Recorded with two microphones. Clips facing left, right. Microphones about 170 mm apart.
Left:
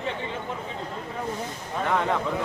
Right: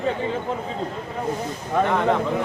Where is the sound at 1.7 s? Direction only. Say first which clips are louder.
Right 8 dB; 70° right (ahead or behind).